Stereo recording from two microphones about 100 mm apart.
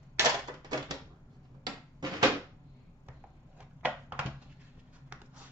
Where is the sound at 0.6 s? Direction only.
40° right (ahead or behind).